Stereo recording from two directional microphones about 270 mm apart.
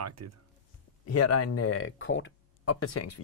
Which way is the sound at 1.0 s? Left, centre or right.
Left.